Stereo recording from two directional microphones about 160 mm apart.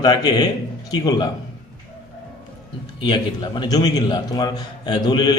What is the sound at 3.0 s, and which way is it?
A man's voice, 30° left (ahead or behind).